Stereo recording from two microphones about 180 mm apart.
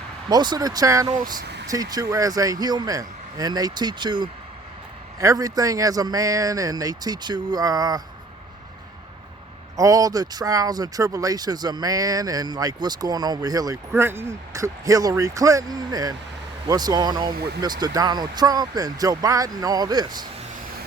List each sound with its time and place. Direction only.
0.3 s speech: 20° right (ahead or behind)
9.7 s speech: 20° right (ahead or behind)